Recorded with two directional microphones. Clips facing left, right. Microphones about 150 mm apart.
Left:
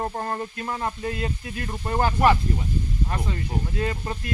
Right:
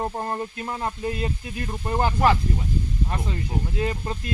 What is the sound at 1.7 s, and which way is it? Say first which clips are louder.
Speech: even; 10° right (ahead or behind).